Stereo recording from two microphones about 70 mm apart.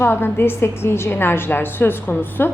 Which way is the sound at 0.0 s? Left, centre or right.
Left.